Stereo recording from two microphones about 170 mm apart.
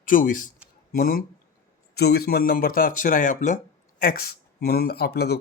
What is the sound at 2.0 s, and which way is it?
Speech, 70° left (ahead or behind).